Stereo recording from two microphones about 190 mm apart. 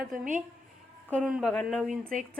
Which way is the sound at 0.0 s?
45° right (ahead or behind).